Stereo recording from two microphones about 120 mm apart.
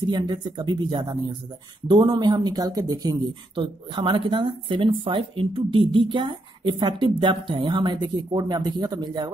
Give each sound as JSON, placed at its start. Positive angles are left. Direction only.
{"t": 0.0, "sound": "speech", "side_deg": -35}
{"t": 3.5, "sound": "speech", "side_deg": -45}